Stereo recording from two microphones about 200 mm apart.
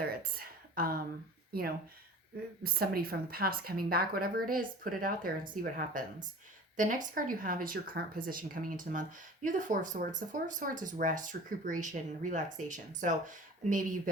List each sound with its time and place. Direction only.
0.0 s speech: 50° right (ahead or behind)
2.6 s speech: 50° right (ahead or behind)